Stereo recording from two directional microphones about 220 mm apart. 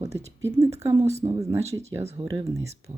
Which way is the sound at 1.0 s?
30° right (ahead or behind).